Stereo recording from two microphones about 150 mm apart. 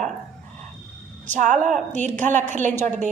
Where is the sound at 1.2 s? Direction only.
55° right (ahead or behind).